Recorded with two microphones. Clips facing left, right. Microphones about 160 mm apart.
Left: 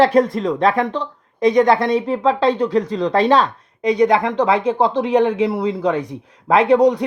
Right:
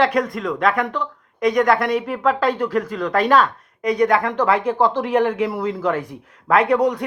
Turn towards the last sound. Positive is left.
turn(degrees=20)  # may be behind; listen again after turning